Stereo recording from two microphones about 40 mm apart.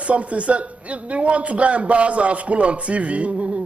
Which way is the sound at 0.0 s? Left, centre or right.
Right.